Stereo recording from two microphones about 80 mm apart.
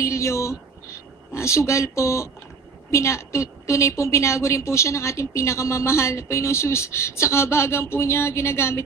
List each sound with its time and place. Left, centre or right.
0.0 s a woman's voice: left